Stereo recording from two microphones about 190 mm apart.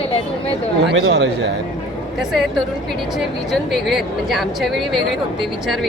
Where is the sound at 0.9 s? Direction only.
65° right (ahead or behind).